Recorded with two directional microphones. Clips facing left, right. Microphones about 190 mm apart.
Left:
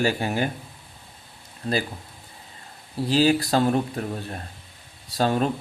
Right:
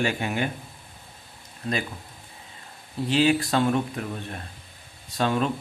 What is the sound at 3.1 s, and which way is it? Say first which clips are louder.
Speech: left 2 dB; 35° left (ahead or behind).